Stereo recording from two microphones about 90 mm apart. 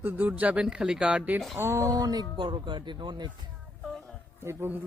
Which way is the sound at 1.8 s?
45° right (ahead or behind).